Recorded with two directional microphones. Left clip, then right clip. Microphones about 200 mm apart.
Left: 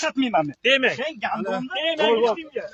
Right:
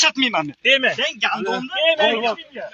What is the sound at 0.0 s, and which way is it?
Speech, 40° left (ahead or behind).